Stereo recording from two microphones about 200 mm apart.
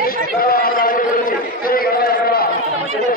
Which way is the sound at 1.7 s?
50° left (ahead or behind).